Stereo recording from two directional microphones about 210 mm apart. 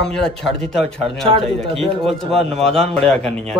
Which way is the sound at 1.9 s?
Centre (ahead or behind).